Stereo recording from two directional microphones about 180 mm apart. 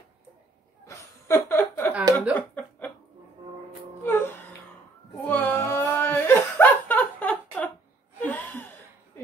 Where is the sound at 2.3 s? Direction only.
10° left (ahead or behind).